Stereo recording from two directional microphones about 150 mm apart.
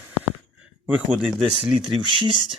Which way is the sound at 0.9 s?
10° right (ahead or behind).